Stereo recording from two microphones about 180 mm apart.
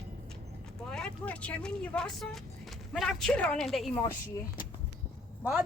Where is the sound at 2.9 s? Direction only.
5° left (ahead or behind).